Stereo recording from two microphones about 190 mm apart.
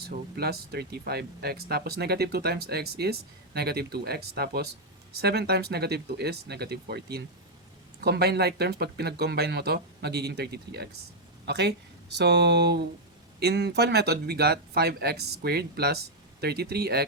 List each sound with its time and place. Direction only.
0.1 s speech: 55° right (ahead or behind)